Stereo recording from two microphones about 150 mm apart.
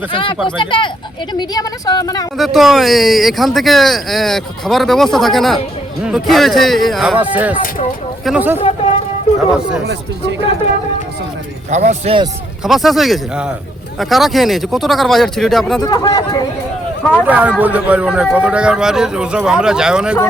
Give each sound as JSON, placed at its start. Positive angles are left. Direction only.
{"t": 0.1, "sound": "a woman's voice", "side_deg": 35}
{"t": 2.4, "sound": "speech", "side_deg": 0}
{"t": 7.2, "sound": "a man's voice", "side_deg": -10}
{"t": 8.5, "sound": "speech", "side_deg": 40}
{"t": 9.5, "sound": "speech", "side_deg": -5}
{"t": 11.7, "sound": "speech", "side_deg": -50}
{"t": 12.6, "sound": "speech", "side_deg": 0}
{"t": 15.8, "sound": "a woman's voice", "side_deg": 25}
{"t": 17.2, "sound": "a man's voice", "side_deg": -10}